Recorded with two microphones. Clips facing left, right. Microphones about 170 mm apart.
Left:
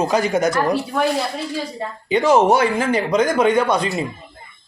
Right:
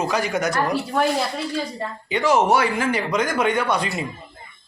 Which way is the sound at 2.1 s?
25° left (ahead or behind).